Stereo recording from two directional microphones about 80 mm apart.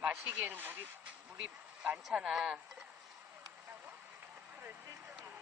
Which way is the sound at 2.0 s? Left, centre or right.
Centre.